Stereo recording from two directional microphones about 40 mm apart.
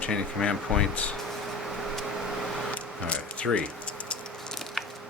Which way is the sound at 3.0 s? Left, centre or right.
Left.